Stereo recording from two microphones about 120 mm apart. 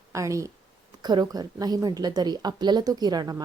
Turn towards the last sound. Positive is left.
turn(degrees=-35)  # may be behind; listen again after turning